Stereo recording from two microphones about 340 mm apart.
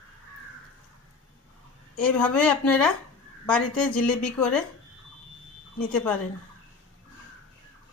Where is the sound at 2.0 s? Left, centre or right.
Centre.